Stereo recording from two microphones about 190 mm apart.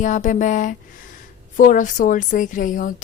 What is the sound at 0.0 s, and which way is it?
A woman's voice, 40° left (ahead or behind).